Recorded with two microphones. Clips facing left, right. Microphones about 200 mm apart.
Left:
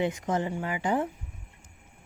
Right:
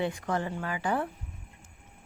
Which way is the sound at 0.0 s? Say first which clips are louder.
Left 2 dB; 20° left (ahead or behind).